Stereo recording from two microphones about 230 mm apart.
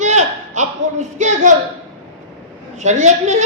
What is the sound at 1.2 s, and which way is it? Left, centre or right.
Speech, right.